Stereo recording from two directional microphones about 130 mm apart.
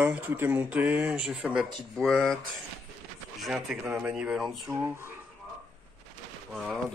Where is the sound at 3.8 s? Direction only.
10° right (ahead or behind).